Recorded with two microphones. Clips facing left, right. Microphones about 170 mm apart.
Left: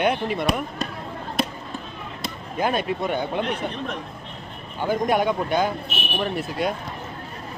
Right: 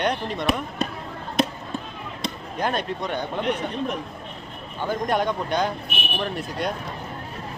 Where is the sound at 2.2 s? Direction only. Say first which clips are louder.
Left 2 dB; 5° left (ahead or behind).